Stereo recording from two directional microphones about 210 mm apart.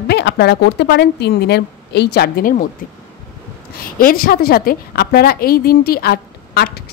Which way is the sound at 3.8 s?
45° left (ahead or behind).